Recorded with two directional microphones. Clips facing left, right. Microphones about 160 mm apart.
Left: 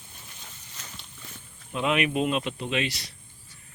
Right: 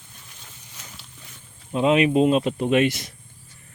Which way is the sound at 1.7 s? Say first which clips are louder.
Right 7 dB; 30° right (ahead or behind).